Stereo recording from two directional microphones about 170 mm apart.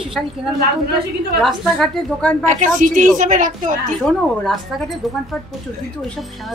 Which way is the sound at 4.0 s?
5° left (ahead or behind).